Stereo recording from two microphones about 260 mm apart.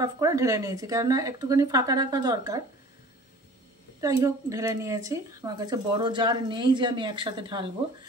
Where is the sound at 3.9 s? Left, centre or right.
Centre.